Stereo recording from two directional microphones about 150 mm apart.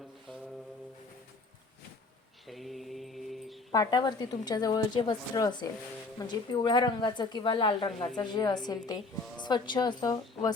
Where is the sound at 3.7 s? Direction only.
25° left (ahead or behind).